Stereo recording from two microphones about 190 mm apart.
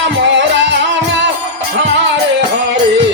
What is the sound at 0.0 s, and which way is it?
Music, 75° right (ahead or behind).